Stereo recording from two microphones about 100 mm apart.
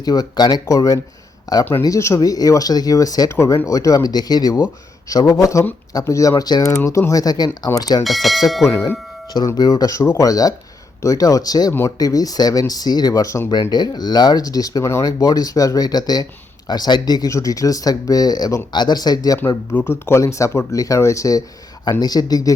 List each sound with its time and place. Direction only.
0.0 s speech: 40° left (ahead or behind)
8.0 s speech: centre (ahead or behind)
8.6 s speech: 30° left (ahead or behind)
9.6 s speech: 40° left (ahead or behind)
13.5 s speech: 45° left (ahead or behind)
19.4 s speech: 20° left (ahead or behind); by 22.5 s 40° left (ahead or behind)